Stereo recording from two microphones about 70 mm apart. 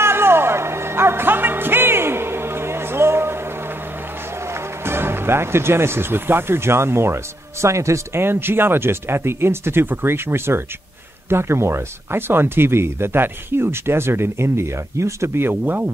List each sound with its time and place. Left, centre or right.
0.0 s music: right
4.8 s speech: right